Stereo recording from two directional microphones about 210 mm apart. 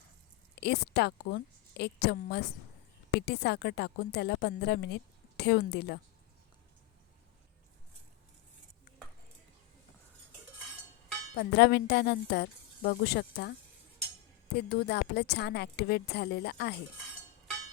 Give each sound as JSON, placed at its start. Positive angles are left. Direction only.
{"t": 0.6, "sound": "a woman's voice", "side_deg": 50}
{"t": 11.3, "sound": "a woman's voice", "side_deg": 50}
{"t": 14.5, "sound": "a woman's voice", "side_deg": 50}